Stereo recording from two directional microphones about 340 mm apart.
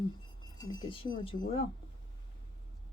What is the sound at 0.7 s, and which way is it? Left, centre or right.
Speech, centre.